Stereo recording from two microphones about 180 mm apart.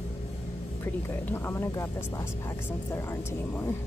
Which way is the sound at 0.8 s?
10° left (ahead or behind).